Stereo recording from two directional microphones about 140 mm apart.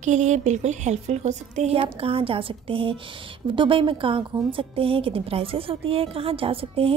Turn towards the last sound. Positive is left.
turn(degrees=-40)  # may be behind; listen again after turning